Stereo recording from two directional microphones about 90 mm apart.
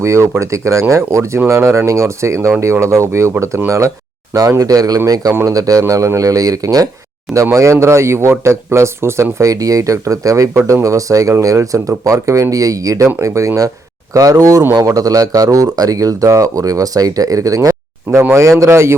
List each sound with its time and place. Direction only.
0.0 s speech: 35° right (ahead or behind)